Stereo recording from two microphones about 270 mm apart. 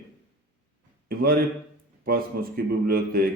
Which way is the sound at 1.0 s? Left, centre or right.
Right.